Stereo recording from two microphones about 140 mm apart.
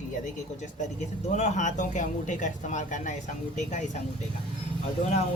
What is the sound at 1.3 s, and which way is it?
Speech, 55° left (ahead or behind).